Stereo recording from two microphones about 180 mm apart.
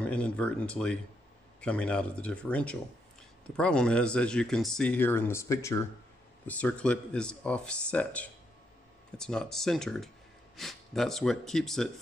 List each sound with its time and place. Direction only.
0.0 s speech: 5° left (ahead or behind)